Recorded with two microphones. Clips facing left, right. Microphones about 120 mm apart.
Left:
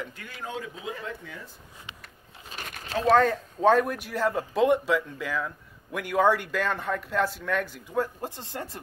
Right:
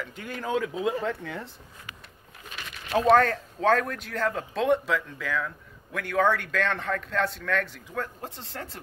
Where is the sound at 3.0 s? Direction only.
5° left (ahead or behind).